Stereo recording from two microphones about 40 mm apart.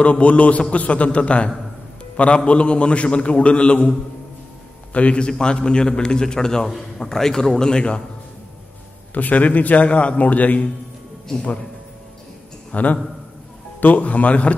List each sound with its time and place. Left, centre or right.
0.0 s a man's voice: left
4.9 s a man's voice: left
5.4 s a man's voice: left
9.1 s a man's voice: left
12.7 s a man's voice: left